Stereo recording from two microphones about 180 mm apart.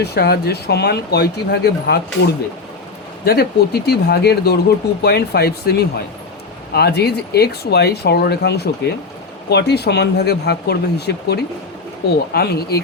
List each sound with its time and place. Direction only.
0.0 s speech: 65° left (ahead or behind)